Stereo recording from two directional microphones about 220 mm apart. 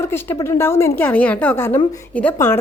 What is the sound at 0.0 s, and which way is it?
A woman's voice, 10° left (ahead or behind).